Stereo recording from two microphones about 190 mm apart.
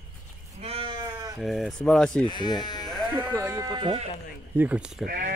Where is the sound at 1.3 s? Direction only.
Centre (ahead or behind).